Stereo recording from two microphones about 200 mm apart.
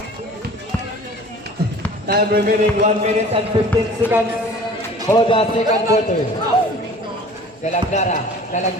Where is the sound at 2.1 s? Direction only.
50° right (ahead or behind).